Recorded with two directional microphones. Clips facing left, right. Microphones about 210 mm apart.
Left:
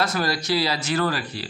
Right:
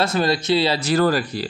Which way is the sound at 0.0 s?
25° right (ahead or behind).